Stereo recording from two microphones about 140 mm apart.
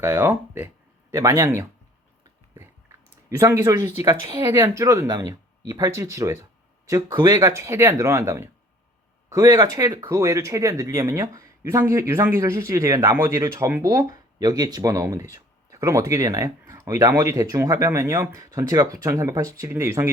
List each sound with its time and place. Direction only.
0.0 s speech: 15° right (ahead or behind)